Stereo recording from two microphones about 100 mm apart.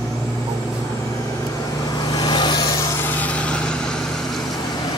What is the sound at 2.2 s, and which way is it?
Vehicle, 50° left (ahead or behind).